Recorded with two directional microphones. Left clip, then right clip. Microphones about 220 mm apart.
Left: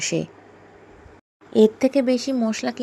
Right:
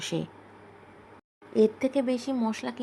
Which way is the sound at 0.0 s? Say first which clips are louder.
Left 8 dB; 10° left (ahead or behind).